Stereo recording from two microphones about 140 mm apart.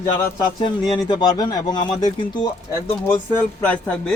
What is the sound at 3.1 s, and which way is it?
Speech, 15° left (ahead or behind).